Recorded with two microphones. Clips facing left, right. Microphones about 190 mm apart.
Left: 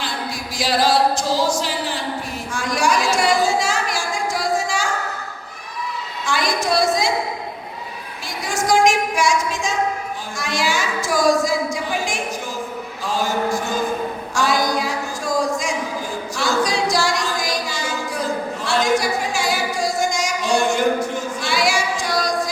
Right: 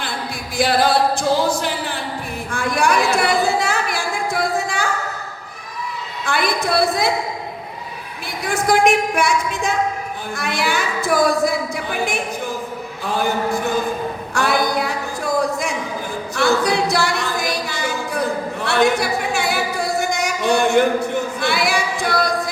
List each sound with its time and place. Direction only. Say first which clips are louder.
0.5 s speech: right 2 dB; 55° right (ahead or behind)
2.5 s a sound: right 2 dB; 60° right (ahead or behind)
6.2 s a woman's voice: right 1 dB; 60° right (ahead or behind)
8.4 s speech: right 1 dB; 60° right (ahead or behind)
13.0 s a sound: right 1 dB; 60° right (ahead or behind)
16.3 s singing: right 4 dB; 60° right (ahead or behind)